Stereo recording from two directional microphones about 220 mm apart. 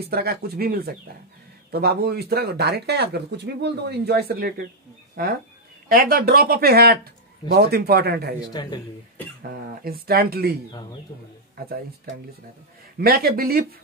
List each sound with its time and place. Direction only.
0.0 s speech: 45° right (ahead or behind)
8.4 s speech: 20° left (ahead or behind)
9.5 s speech: 45° right (ahead or behind)
10.7 s speech: 20° left (ahead or behind)
11.6 s speech: 45° right (ahead or behind)
13.0 s speech: 45° right (ahead or behind)